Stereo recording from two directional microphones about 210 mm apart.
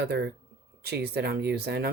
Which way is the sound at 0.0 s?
50° right (ahead or behind).